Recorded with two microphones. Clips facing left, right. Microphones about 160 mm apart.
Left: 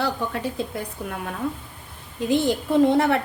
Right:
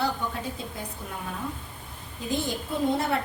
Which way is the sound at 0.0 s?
65° left (ahead or behind).